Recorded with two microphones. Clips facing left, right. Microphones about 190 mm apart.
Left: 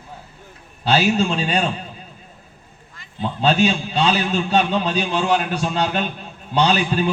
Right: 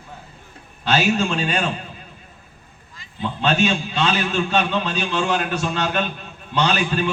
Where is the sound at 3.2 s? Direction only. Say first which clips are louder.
Left 2 dB; 35° left (ahead or behind).